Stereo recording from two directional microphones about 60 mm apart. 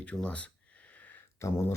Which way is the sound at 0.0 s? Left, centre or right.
Left.